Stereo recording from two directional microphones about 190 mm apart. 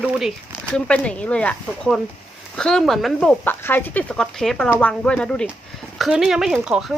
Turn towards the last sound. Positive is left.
turn(degrees=-5)  # may be behind; listen again after turning